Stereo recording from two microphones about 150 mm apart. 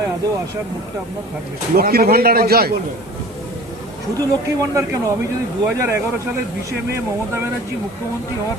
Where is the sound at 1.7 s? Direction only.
85° right.